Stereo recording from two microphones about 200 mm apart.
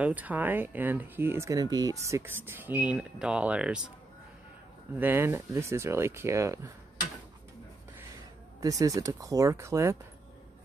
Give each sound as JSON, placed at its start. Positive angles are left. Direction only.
{"t": 0.0, "sound": "speech", "side_deg": -10}
{"t": 4.9, "sound": "speech", "side_deg": -10}
{"t": 8.5, "sound": "speech", "side_deg": -15}